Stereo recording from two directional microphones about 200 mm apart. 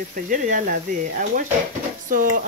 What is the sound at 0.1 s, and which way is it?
Speech, 40° right (ahead or behind).